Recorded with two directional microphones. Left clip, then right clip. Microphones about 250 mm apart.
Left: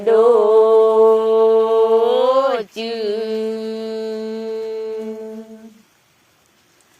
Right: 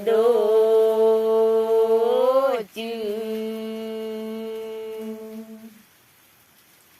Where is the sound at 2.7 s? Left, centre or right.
Centre.